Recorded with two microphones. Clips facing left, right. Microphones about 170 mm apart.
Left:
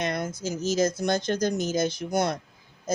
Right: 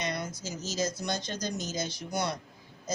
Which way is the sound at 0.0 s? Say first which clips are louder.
Left 6 dB; 50° left (ahead or behind).